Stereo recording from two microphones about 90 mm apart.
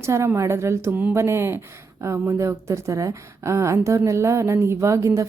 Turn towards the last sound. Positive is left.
turn(degrees=-35)  # may be behind; listen again after turning